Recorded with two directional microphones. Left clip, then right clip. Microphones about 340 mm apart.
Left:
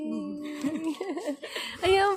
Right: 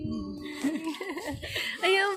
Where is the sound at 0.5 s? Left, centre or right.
Left.